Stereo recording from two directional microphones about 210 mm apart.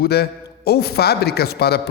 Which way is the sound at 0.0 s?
50° left (ahead or behind).